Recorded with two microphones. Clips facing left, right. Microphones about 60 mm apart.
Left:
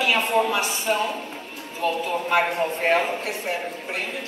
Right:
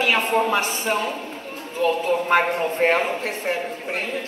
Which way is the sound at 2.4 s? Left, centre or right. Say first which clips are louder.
Right 2 dB; right.